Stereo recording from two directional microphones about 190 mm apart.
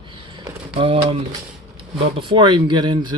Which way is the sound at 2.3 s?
25° right (ahead or behind).